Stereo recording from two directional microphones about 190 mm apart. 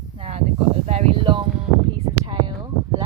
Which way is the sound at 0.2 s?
30° right (ahead or behind).